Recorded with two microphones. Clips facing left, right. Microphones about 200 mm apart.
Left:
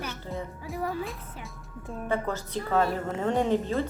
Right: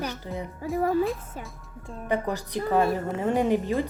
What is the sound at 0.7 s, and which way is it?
Speech, 45° right (ahead or behind).